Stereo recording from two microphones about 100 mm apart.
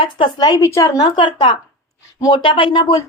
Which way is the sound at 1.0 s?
55° left (ahead or behind).